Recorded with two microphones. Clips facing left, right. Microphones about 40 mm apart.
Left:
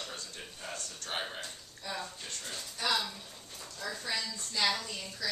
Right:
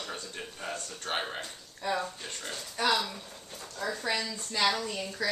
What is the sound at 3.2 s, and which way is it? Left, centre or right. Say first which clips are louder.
Dog: right 3 dB; centre.